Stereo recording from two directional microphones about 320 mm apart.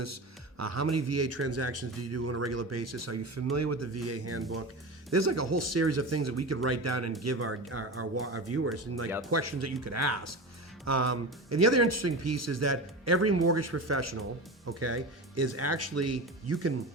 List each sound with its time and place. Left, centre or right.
0.6 s speech: right